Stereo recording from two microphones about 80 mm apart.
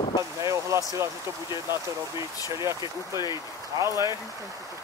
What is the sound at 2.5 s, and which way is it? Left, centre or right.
Speech, right.